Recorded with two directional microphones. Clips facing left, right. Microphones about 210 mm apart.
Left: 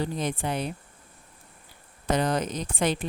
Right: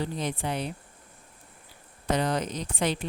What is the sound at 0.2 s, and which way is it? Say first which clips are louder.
Speech: left 2 dB; 50° left (ahead or behind).